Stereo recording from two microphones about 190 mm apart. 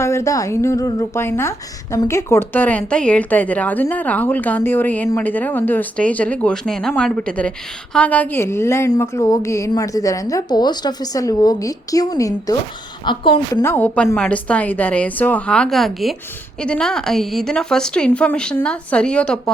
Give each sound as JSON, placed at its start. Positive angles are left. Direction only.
{"t": 0.0, "sound": "a woman's voice", "side_deg": 15}
{"t": 13.5, "sound": "a woman's voice", "side_deg": 15}